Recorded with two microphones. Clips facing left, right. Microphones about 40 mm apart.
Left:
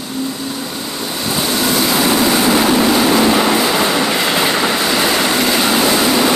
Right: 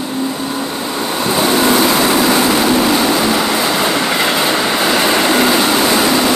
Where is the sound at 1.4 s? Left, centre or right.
Centre.